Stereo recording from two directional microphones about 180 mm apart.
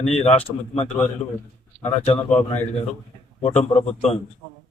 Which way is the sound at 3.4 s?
35° left (ahead or behind).